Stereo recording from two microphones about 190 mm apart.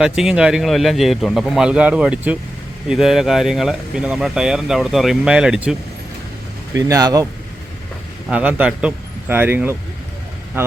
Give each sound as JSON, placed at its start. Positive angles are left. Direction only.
{"t": 0.0, "sound": "speech", "side_deg": -5}
{"t": 6.7, "sound": "a man's voice", "side_deg": -15}
{"t": 8.3, "sound": "a man's voice", "side_deg": -5}